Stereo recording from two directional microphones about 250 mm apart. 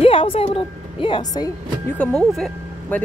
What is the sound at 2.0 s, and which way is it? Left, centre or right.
Speech, centre.